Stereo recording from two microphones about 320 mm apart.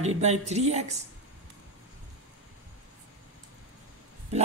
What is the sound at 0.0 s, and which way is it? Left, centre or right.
Speech, right.